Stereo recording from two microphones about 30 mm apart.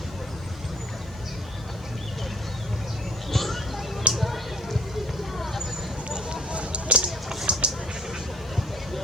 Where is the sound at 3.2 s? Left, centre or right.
Centre.